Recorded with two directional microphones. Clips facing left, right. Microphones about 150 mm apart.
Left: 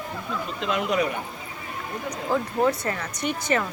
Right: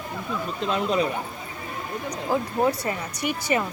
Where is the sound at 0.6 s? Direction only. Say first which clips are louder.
Right 1 dB; 30° right (ahead or behind).